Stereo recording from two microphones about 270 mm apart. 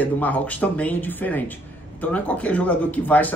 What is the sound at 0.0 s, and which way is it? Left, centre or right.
Speech, centre.